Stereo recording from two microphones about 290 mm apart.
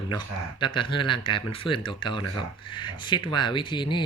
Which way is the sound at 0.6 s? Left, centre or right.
Centre.